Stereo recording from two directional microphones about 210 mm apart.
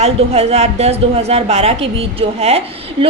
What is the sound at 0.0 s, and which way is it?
A woman's voice, 30° right (ahead or behind).